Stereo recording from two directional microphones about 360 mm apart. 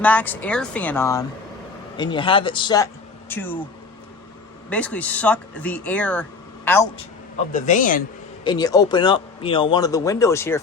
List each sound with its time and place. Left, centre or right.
0.0 s speech: centre
4.7 s speech: centre
7.5 s speech: left
8.4 s speech: centre